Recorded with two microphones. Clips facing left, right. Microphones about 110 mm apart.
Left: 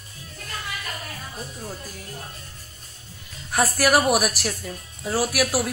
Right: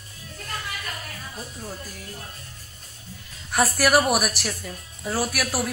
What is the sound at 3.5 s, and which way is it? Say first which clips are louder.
Speech: even; centre (ahead or behind).